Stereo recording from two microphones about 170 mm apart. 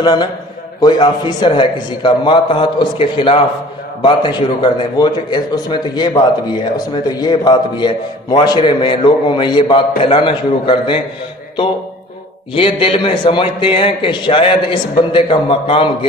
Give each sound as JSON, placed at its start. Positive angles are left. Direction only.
{"t": 0.0, "sound": "a man's voice", "side_deg": 25}
{"t": 12.5, "sound": "a man's voice", "side_deg": 35}